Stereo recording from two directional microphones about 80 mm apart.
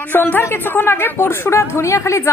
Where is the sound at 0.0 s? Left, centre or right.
Left.